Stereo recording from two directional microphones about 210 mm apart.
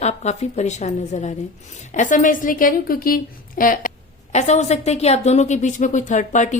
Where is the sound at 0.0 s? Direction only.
35° left (ahead or behind).